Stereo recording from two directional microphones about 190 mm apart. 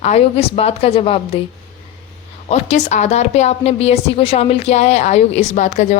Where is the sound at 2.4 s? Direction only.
35° left (ahead or behind).